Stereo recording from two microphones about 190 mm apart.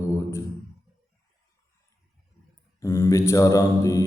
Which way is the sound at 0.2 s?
15° left (ahead or behind).